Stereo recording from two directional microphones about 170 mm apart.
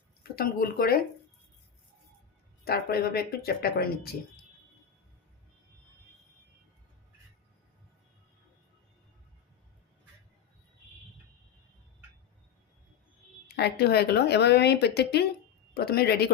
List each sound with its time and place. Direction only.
0.2 s speech: 60° left (ahead or behind)
2.6 s speech: 65° left (ahead or behind)
13.6 s speech: 70° left (ahead or behind)